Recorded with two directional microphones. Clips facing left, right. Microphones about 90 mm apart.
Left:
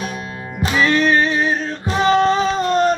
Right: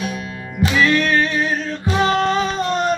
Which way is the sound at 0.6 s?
30° left (ahead or behind).